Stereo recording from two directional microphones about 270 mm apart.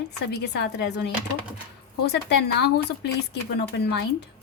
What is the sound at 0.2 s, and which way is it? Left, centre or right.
A woman's voice, left.